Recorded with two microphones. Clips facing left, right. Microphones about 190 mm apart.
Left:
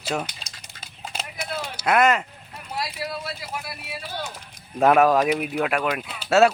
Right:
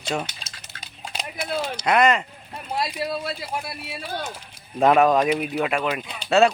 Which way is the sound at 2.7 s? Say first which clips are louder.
Right 4 dB; 25° right (ahead or behind).